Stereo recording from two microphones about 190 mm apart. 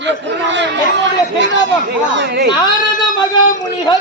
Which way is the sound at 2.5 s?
20° left (ahead or behind).